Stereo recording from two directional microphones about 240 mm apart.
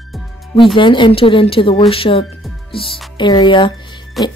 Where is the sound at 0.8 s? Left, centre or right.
Centre.